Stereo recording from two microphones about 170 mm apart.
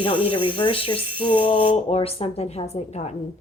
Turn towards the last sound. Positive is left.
turn(degrees=40)  # may be behind; listen again after turning